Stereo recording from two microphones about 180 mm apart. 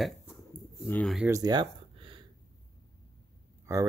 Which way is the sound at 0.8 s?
10° left (ahead or behind).